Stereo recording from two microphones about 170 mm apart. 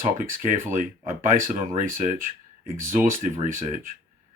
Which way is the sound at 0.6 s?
15° right (ahead or behind).